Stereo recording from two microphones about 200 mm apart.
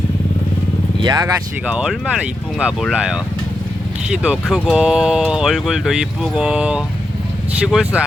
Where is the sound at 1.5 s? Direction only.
5° right (ahead or behind).